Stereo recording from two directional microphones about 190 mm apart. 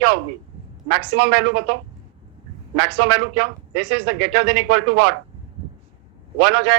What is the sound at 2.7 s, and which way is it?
Speech, 65° right (ahead or behind).